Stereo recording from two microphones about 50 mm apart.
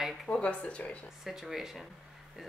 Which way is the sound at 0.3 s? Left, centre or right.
Left.